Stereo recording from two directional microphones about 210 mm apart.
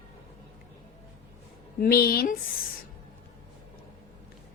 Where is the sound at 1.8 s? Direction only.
45° left (ahead or behind).